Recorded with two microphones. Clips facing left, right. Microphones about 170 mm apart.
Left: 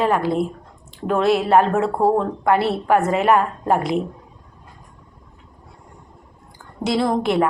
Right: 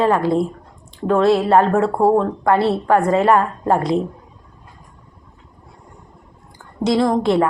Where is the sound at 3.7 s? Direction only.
25° right (ahead or behind).